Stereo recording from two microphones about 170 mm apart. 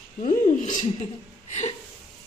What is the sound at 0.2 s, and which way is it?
Speech, 40° left (ahead or behind).